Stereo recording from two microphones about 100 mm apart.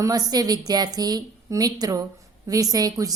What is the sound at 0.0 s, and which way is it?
A woman's voice, 40° right (ahead or behind).